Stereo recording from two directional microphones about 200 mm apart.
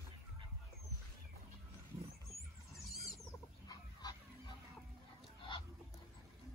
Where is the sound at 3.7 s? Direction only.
20° left (ahead or behind).